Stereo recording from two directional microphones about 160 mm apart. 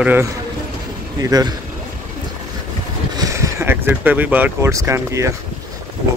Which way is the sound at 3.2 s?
20° right (ahead or behind).